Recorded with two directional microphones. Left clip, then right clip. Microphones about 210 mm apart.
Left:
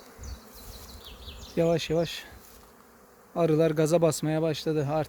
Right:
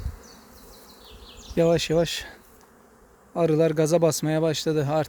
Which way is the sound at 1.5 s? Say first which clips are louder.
Right 5 dB; 20° right (ahead or behind).